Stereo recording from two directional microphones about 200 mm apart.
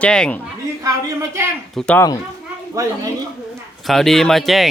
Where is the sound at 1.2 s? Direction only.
10° right (ahead or behind).